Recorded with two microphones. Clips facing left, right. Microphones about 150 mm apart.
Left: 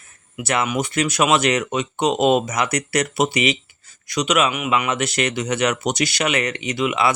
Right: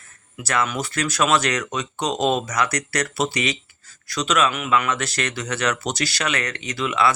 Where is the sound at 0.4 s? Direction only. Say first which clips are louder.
Left 2 dB; 20° left (ahead or behind).